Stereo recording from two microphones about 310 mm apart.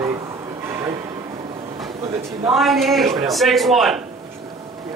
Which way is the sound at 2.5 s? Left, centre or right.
Centre.